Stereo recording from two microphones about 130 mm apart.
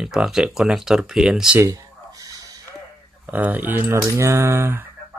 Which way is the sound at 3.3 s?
15° right (ahead or behind).